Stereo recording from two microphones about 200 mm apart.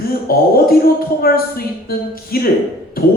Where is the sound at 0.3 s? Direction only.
50° left (ahead or behind).